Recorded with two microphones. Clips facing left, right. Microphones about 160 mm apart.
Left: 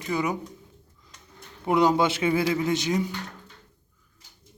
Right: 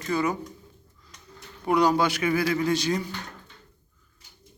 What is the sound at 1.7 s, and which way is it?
A man's voice, 20° left (ahead or behind).